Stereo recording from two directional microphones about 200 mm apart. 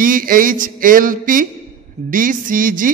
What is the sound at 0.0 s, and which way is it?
A man's voice, 45° right (ahead or behind).